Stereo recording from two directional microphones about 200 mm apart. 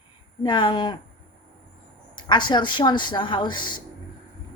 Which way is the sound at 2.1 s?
20° left (ahead or behind).